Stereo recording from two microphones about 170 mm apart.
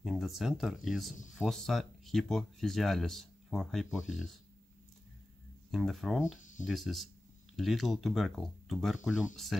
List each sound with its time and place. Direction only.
0.0 s speech: centre (ahead or behind)
5.7 s speech: centre (ahead or behind)
6.2 s speech: 45° left (ahead or behind)
6.6 s speech: centre (ahead or behind)